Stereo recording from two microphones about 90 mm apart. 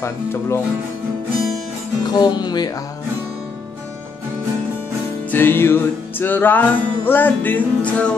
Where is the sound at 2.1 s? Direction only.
50° left (ahead or behind).